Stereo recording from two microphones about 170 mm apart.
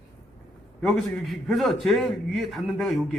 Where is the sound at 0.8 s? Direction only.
Centre (ahead or behind).